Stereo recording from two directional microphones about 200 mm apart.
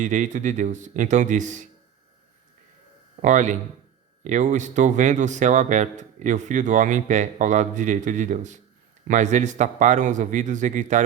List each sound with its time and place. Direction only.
0.0 s speech: 35° right (ahead or behind)
3.2 s speech: 35° right (ahead or behind)